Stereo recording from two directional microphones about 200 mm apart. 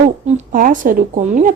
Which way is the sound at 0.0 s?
35° right (ahead or behind).